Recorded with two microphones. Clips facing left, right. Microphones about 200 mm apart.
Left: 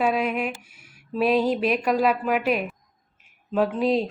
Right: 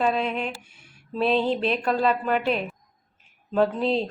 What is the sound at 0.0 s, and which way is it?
A woman's voice, 10° left (ahead or behind).